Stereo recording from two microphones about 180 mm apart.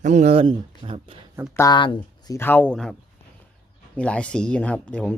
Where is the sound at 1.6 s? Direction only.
25° left (ahead or behind); by 2.9 s 5° left (ahead or behind).